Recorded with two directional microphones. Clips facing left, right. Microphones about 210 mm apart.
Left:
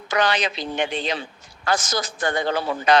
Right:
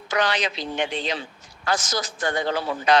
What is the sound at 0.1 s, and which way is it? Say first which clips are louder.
Speech: left 2 dB; 55° left (ahead or behind).